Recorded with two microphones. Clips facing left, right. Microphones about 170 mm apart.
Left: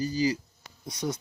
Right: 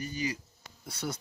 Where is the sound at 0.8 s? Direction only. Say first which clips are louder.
Left 5 dB; 15° left (ahead or behind).